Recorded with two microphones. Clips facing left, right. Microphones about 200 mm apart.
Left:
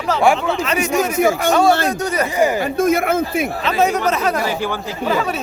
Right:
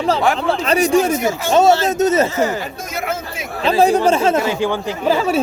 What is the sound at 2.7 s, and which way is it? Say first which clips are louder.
Speech: left 9 dB; 55° left (ahead or behind).